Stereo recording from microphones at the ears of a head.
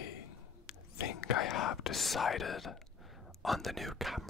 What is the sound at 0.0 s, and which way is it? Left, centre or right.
Whispering, left.